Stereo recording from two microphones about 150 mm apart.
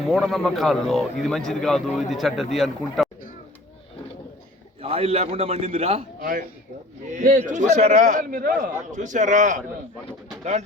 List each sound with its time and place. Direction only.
0.1 s a man's voice: centre (ahead or behind)
4.8 s a man's voice: 40° right (ahead or behind)
7.1 s a man's voice: 60° right (ahead or behind)